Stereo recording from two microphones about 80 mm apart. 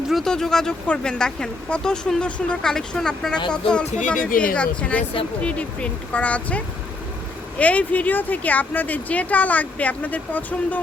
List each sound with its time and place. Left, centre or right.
0.1 s speech: centre
7.6 s a woman's voice: centre